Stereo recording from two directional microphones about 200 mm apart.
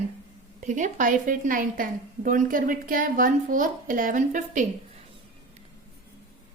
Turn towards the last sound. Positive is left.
turn(degrees=-40)  # may be behind; listen again after turning